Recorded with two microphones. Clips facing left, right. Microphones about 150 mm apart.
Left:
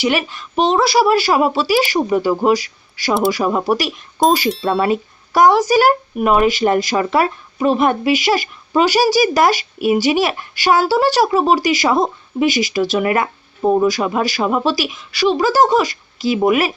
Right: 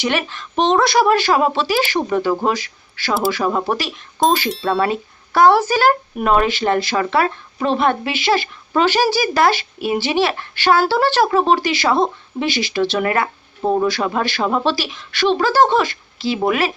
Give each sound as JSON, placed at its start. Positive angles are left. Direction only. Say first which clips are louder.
{"t": 0.0, "sound": "speech", "louder": "left 3 dB", "side_deg": 10}
{"t": 4.4, "sound": "speech", "louder": "left 2 dB", "side_deg": 0}
{"t": 4.8, "sound": "speech", "louder": "left 2 dB", "side_deg": 15}